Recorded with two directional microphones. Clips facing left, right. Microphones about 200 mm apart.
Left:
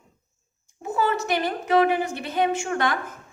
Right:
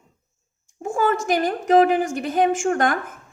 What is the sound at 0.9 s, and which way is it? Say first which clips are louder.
A woman's voice: right 3 dB; 50° right (ahead or behind).